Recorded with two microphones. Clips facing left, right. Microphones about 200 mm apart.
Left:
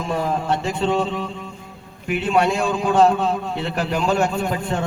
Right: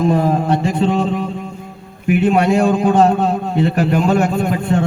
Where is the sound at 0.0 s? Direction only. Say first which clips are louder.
Right 8 dB; 40° right (ahead or behind).